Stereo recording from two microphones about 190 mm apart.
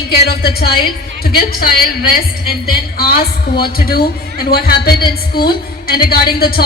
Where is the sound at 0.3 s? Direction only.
55° left (ahead or behind).